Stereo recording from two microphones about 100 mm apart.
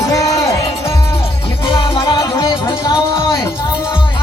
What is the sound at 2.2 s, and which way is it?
Speech, 40° left (ahead or behind).